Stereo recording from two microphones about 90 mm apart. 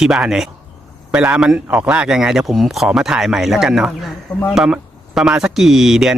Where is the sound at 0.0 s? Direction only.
5° right (ahead or behind).